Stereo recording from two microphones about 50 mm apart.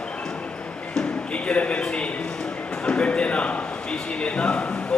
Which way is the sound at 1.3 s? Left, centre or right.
Left.